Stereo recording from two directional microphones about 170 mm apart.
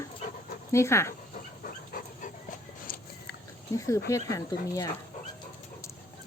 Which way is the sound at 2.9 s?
60° left (ahead or behind).